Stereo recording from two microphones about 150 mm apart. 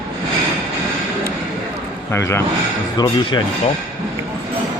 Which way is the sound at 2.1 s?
15° left (ahead or behind).